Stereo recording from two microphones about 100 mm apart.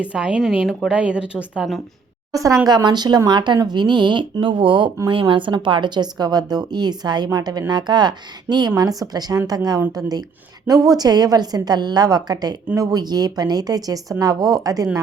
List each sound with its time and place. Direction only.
0.0 s speech: 10° right (ahead or behind)
2.3 s a woman's voice: 35° right (ahead or behind)
2.6 s a woman's voice: 45° right (ahead or behind)